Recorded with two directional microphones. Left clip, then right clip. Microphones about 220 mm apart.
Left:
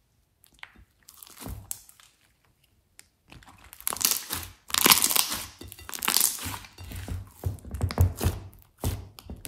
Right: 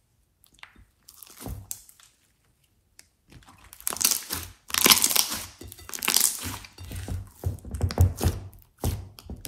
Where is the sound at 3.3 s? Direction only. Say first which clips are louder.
Left 5 dB; 30° left (ahead or behind).